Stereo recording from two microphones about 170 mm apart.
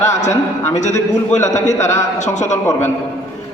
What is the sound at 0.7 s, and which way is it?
Speech, 45° left (ahead or behind).